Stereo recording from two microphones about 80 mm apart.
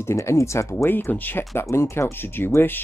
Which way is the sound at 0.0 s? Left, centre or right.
Left.